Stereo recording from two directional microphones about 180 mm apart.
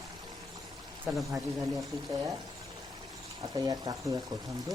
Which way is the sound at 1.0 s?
Centre (ahead or behind).